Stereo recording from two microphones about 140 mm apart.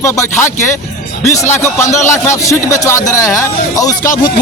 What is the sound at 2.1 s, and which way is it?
A man's voice, 20° left (ahead or behind).